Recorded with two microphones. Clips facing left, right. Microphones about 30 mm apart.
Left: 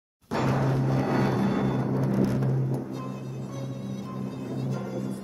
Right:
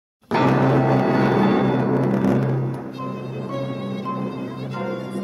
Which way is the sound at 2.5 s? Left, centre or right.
Right.